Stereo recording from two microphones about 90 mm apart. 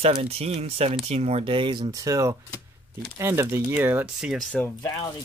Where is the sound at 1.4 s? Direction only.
70° right (ahead or behind).